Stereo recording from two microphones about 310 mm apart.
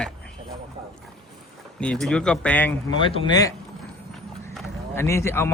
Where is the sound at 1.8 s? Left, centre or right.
Centre.